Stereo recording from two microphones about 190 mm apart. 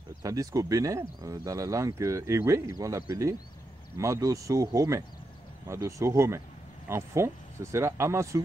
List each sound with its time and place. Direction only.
0.2 s speech: 20° right (ahead or behind)